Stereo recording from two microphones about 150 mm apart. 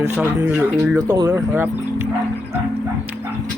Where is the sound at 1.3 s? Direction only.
15° right (ahead or behind).